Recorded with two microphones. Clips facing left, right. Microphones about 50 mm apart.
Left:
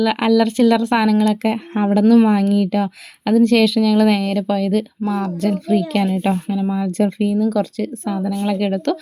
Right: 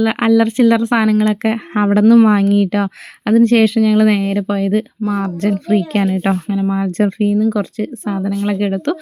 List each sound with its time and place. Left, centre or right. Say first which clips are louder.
0.0 s speech: right 2 dB; right
1.8 s speech: right 3 dB; right
3.8 s speech: right 2 dB; right
5.4 s speech: right 2 dB; right
6.5 s speech: right 3 dB; right